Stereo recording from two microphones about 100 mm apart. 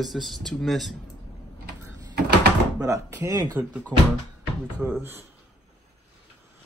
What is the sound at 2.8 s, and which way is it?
Speech, 30° right (ahead or behind).